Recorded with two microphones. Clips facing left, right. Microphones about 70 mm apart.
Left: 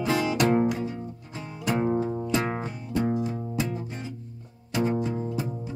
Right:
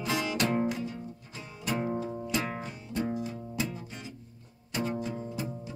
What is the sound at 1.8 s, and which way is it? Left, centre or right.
Music, left.